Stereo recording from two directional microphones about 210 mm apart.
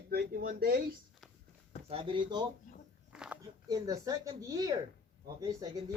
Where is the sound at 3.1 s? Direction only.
5° right (ahead or behind).